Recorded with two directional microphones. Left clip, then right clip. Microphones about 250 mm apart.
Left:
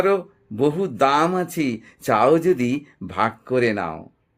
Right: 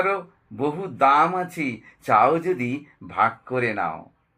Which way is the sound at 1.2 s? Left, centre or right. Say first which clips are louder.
Left 1 dB; left.